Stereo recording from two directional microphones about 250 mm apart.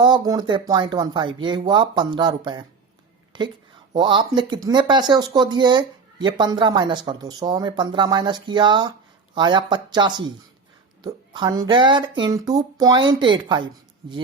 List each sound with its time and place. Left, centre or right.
0.0 s a woman's voice: centre